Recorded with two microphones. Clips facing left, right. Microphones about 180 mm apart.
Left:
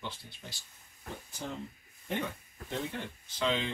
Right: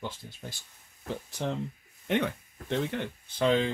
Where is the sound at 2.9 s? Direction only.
70° right (ahead or behind).